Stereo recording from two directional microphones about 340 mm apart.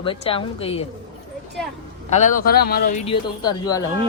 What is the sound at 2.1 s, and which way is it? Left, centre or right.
Speech, left.